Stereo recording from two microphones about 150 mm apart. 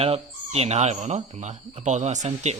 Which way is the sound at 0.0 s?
40° right (ahead or behind).